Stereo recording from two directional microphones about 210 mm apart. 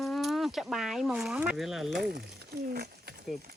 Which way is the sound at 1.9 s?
50° right (ahead or behind).